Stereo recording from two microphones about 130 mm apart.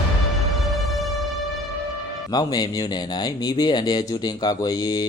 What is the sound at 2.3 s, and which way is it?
Speech, 30° left (ahead or behind).